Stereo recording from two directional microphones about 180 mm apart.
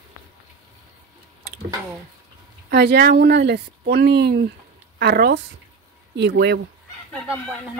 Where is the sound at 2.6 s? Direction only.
65° right (ahead or behind).